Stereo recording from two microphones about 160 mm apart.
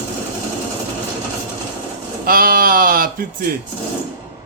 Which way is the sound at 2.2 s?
65° right (ahead or behind).